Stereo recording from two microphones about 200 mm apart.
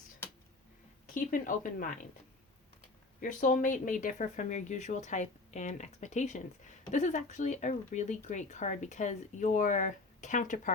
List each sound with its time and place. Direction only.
1.0 s speech: 40° left (ahead or behind)
3.2 s speech: 40° left (ahead or behind)